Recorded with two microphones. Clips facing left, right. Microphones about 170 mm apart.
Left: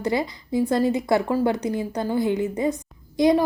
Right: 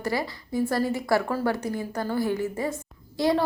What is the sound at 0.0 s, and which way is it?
A woman's voice, 20° left (ahead or behind).